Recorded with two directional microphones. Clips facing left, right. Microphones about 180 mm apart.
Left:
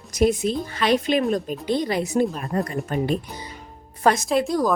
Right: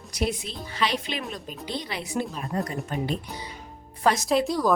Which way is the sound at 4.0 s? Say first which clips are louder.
Left 4 dB; 50° left (ahead or behind).